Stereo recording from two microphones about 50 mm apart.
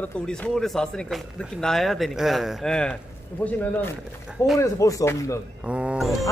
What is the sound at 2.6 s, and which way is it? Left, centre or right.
Speech, centre.